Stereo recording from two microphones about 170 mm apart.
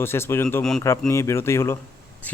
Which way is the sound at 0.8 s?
15° left (ahead or behind).